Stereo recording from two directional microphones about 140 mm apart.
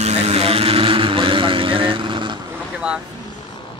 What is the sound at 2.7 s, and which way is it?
Boat, 5° right (ahead or behind).